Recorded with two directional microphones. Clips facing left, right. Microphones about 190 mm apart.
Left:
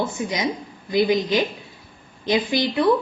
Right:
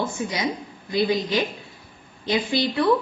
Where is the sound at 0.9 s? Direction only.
20° left (ahead or behind).